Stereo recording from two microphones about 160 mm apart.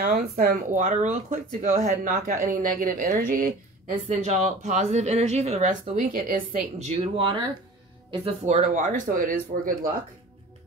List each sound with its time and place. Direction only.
0.0 s a woman's voice: 65° right (ahead or behind)